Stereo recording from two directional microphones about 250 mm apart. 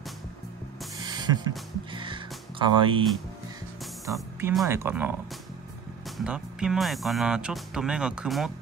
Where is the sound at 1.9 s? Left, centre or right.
Centre.